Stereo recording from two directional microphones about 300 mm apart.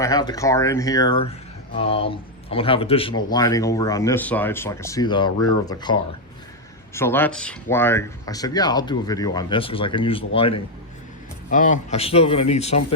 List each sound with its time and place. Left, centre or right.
0.0 s speech: centre